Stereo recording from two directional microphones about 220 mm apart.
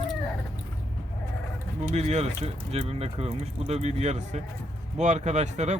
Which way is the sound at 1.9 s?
30° right (ahead or behind).